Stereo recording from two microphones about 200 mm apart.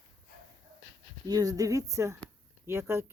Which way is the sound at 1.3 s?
20° right (ahead or behind).